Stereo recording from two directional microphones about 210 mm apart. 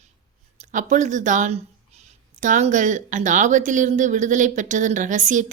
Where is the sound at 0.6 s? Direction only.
35° right (ahead or behind).